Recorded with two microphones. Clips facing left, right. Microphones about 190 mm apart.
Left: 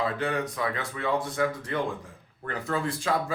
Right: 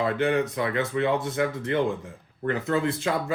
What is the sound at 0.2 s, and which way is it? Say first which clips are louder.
Speech: right 5 dB; 25° right (ahead or behind).